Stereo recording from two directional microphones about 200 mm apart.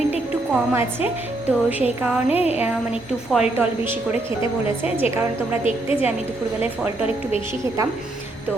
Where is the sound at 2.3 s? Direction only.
30° left (ahead or behind).